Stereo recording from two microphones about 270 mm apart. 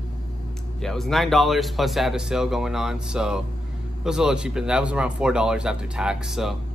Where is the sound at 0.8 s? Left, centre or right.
Centre.